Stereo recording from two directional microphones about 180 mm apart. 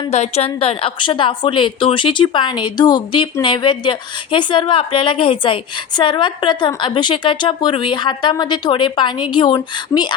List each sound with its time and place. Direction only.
0.1 s a woman's voice: 35° left (ahead or behind)